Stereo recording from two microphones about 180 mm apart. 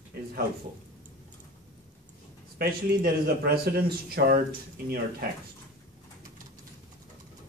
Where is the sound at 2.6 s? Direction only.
55° right (ahead or behind).